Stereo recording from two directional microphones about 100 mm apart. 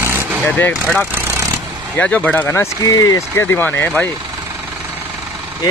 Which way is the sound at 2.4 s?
30° left (ahead or behind).